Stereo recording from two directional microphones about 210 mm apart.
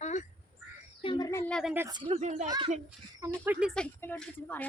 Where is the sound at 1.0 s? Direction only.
20° left (ahead or behind); by 1.7 s centre (ahead or behind).